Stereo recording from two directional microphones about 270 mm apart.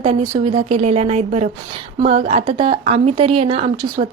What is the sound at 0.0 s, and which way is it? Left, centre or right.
A woman's voice, right.